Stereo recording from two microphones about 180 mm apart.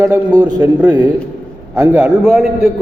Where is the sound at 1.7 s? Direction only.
10° right (ahead or behind).